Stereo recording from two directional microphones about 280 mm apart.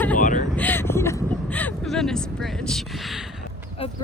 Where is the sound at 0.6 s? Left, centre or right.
Centre.